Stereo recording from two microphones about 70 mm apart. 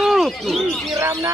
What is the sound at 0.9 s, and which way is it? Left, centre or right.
Speech, right.